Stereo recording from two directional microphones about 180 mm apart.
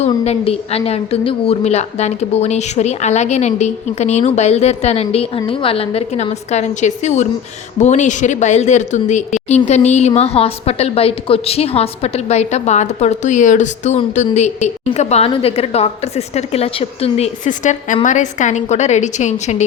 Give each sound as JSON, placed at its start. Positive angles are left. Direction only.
{"t": 0.0, "sound": "a woman's voice", "side_deg": 35}